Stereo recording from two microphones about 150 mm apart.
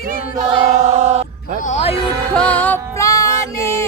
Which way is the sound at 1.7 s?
40° left (ahead or behind).